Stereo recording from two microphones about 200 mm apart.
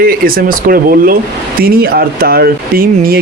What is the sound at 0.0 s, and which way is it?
Speech, 45° right (ahead or behind).